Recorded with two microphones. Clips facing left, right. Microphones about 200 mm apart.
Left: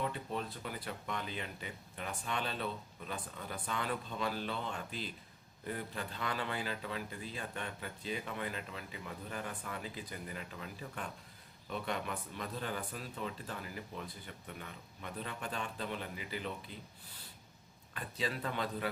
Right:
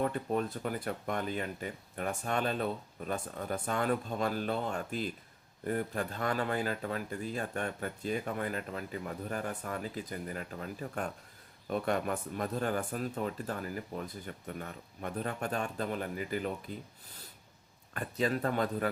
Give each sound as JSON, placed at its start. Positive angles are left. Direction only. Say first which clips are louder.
{"t": 0.0, "sound": "a man's voice", "louder": "right 7 dB", "side_deg": -50}
{"t": 17.9, "sound": "a man's voice", "louder": "right 7 dB", "side_deg": -45}